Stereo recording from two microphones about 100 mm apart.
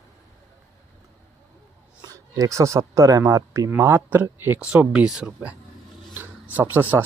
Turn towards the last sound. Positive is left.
turn(degrees=-20)  # may be behind; listen again after turning